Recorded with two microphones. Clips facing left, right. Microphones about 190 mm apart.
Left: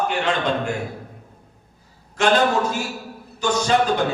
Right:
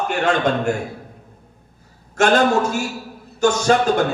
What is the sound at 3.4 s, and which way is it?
Speech, 50° right (ahead or behind).